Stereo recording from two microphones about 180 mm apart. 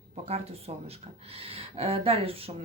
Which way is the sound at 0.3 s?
35° right (ahead or behind).